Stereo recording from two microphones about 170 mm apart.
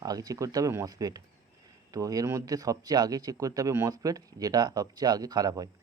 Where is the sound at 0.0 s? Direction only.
20° right (ahead or behind).